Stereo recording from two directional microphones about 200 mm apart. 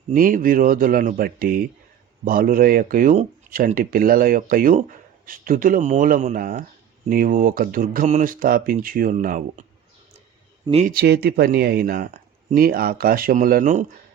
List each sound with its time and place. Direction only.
0.1 s speech: 45° right (ahead or behind)
10.7 s speech: 35° right (ahead or behind)
10.9 s speech: 50° right (ahead or behind)